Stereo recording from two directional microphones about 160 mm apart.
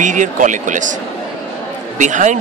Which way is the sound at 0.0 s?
50° right (ahead or behind).